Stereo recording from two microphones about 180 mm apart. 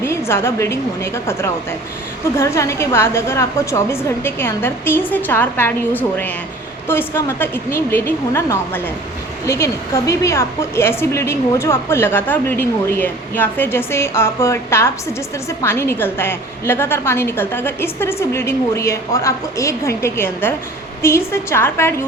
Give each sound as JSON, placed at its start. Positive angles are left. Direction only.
{"t": 0.0, "sound": "a woman's voice", "side_deg": 15}